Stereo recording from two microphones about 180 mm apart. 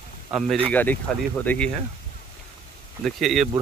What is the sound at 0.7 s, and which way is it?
Speech, 10° left (ahead or behind).